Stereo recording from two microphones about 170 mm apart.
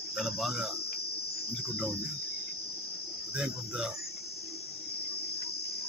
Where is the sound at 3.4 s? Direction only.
5° right (ahead or behind).